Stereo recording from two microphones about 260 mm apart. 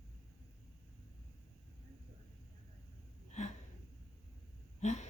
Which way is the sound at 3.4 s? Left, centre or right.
Left.